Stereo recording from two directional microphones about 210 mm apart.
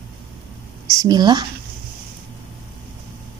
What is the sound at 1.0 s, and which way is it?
Speech, 20° right (ahead or behind).